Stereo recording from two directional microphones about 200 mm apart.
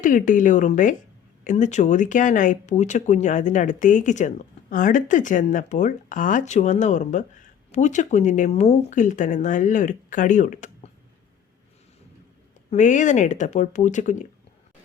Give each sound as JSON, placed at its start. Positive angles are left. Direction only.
{"t": 0.0, "sound": "speech", "side_deg": 40}
{"t": 12.7, "sound": "speech", "side_deg": 40}